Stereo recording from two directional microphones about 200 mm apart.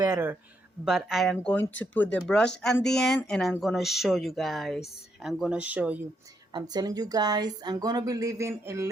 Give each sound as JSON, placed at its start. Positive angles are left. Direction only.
{"t": 0.0, "sound": "speech", "side_deg": -15}
{"t": 0.9, "sound": "speech", "side_deg": -5}
{"t": 6.5, "sound": "speech", "side_deg": -20}